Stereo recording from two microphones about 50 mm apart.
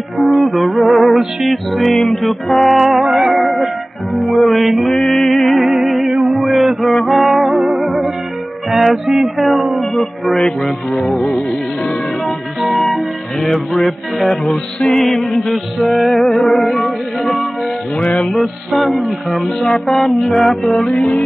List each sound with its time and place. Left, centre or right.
0.2 s music: centre
8.7 s speech: centre
11.1 s music: centre
12.6 s music: centre
20.9 s music: centre